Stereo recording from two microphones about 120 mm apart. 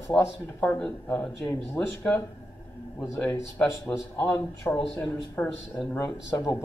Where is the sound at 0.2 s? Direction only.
15° left (ahead or behind).